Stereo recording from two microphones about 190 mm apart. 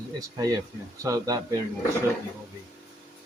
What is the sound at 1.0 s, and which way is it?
Speech, 20° right (ahead or behind).